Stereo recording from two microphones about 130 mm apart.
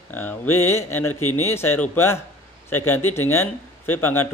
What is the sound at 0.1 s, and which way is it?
A man's voice, 15° left (ahead or behind).